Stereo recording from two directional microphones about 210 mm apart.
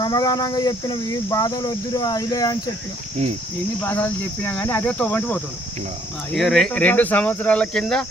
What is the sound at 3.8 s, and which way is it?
Speech, 10° left (ahead or behind).